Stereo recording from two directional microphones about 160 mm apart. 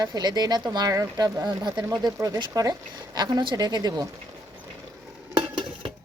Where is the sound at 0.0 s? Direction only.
25° right (ahead or behind).